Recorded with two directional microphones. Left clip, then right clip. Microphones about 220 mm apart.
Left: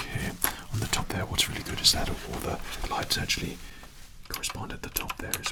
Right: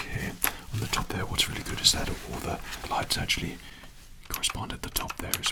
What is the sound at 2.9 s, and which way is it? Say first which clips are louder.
Speech: right 1 dB; 15° right (ahead or behind).